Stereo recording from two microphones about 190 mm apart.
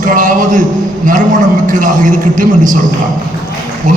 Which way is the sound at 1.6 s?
45° right (ahead or behind).